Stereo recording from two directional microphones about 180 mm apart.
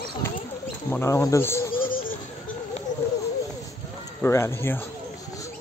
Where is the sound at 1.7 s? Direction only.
50° left (ahead or behind).